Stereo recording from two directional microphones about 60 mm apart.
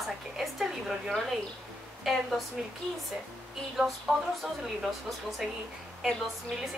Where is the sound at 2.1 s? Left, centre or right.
Centre.